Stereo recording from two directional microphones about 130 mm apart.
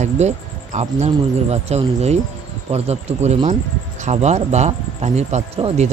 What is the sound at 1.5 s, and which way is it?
Speech, 55° right (ahead or behind).